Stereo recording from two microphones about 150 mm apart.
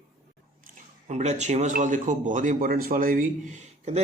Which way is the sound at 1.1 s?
50° right (ahead or behind).